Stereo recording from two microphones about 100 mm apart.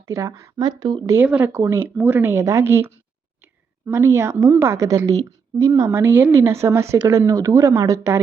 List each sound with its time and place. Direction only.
0.1 s speech: 30° right (ahead or behind)
0.6 s speech: 45° right (ahead or behind)
1.0 s a woman's voice: 25° right (ahead or behind)